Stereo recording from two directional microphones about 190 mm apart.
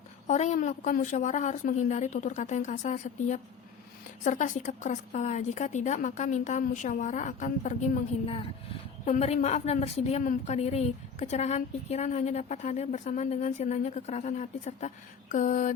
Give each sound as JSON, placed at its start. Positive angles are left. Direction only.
{"t": 0.3, "sound": "a woman's voice", "side_deg": 40}
{"t": 9.0, "sound": "a woman's voice", "side_deg": 35}